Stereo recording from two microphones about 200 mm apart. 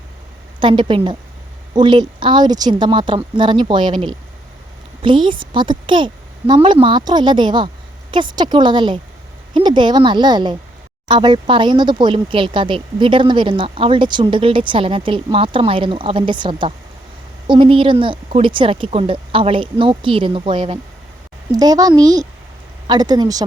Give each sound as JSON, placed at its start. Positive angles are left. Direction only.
{"t": 0.6, "sound": "speech", "side_deg": -25}